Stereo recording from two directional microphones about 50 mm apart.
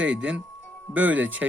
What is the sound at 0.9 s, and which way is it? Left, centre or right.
Speech, right.